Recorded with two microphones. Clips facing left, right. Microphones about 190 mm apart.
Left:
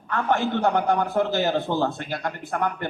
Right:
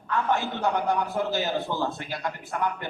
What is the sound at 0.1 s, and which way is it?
A man's voice, 60° left (ahead or behind).